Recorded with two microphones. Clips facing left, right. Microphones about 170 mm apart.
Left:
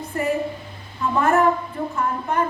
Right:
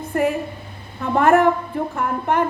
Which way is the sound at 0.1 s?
60° right (ahead or behind).